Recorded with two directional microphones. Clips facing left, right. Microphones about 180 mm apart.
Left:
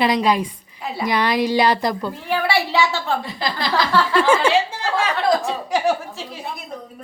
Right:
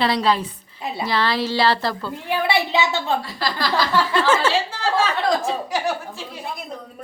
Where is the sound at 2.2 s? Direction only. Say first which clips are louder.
Even; 20° right (ahead or behind).